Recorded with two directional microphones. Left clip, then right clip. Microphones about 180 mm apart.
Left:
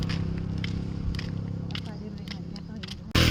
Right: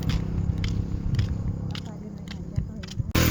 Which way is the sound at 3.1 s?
40° right (ahead or behind).